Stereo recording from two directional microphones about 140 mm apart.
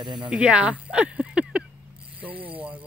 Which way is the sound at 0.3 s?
10° right (ahead or behind).